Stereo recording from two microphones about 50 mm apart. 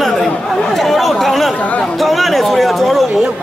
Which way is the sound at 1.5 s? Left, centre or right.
Left.